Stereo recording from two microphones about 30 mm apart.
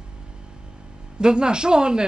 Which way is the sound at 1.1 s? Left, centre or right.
Right.